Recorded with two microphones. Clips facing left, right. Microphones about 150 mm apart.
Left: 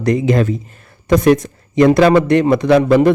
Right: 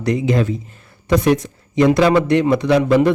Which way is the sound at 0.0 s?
50° left (ahead or behind).